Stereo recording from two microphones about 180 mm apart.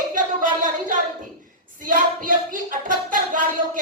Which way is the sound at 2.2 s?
45° right (ahead or behind).